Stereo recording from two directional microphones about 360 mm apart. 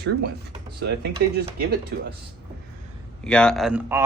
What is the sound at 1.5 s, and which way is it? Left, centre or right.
Speech, right.